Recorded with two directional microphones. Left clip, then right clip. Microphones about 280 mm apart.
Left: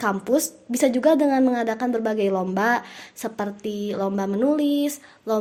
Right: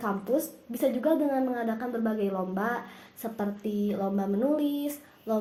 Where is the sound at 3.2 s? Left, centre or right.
Left.